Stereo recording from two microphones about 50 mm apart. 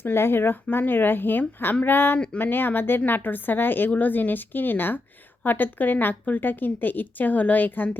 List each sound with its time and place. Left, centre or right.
0.0 s speech: left